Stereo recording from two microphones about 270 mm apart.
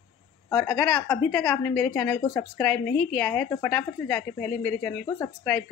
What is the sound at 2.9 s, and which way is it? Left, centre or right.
Speech, left.